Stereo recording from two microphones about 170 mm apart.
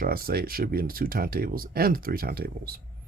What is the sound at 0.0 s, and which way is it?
Speech, 60° right (ahead or behind).